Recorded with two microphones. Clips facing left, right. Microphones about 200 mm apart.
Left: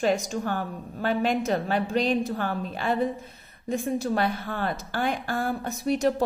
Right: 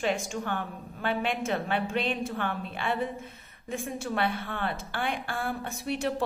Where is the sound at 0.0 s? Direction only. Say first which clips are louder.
Left 5 dB; 40° left (ahead or behind).